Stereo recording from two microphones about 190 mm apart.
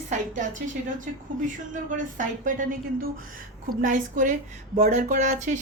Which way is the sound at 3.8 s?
45° right (ahead or behind).